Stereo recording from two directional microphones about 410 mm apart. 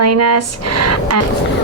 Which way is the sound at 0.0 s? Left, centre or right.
Right.